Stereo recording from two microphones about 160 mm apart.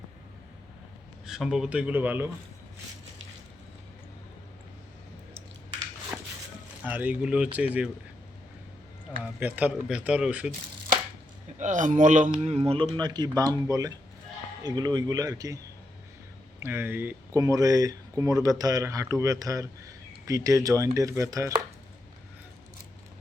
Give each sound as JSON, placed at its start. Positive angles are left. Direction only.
{"t": 1.3, "sound": "speech", "side_deg": -5}
{"t": 6.1, "sound": "a sound", "side_deg": -10}
{"t": 6.8, "sound": "speech", "side_deg": -10}
{"t": 9.4, "sound": "speech", "side_deg": -10}
{"t": 11.6, "sound": "speech", "side_deg": -50}
{"t": 13.0, "sound": "speech", "side_deg": -25}
{"t": 16.6, "sound": "speech", "side_deg": -15}